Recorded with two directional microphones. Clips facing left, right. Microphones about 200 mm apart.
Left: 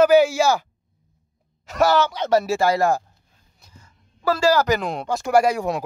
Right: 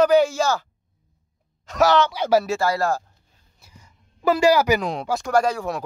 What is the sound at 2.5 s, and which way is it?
Speech, 20° left (ahead or behind).